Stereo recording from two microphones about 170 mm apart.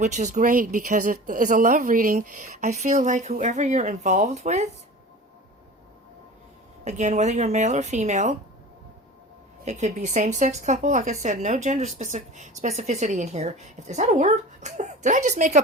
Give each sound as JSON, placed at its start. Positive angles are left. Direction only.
{"t": 0.0, "sound": "a woman's voice", "side_deg": -45}
{"t": 6.8, "sound": "a woman's voice", "side_deg": -45}
{"t": 9.6, "sound": "a woman's voice", "side_deg": -45}